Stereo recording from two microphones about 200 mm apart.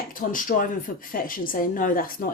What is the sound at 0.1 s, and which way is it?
Speech, 45° left (ahead or behind).